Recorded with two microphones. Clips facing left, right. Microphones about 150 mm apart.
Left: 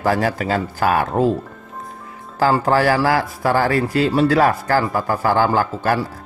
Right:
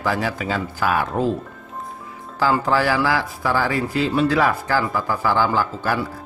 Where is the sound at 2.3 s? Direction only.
45° left (ahead or behind).